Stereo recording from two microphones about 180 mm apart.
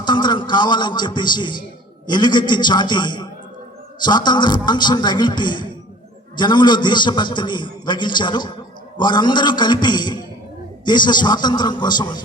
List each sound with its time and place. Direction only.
0.0 s a man's voice: 25° left (ahead or behind)